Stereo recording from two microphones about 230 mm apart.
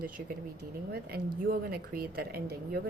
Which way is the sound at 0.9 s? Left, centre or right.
Right.